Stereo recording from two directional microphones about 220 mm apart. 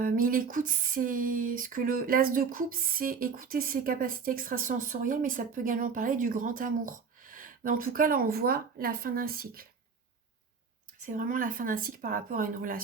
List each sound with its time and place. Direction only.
0.0 s speech: 40° right (ahead or behind)
11.0 s speech: 35° right (ahead or behind)